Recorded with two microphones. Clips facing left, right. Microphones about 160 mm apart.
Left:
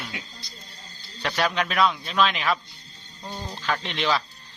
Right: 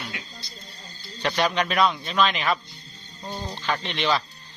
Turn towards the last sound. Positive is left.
turn(degrees=0)  # may be behind; listen again after turning